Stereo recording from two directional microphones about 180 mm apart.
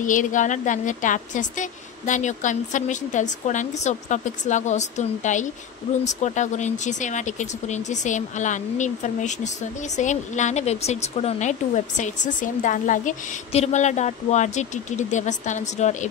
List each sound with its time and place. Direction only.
0.0 s a woman's voice: 45° left (ahead or behind)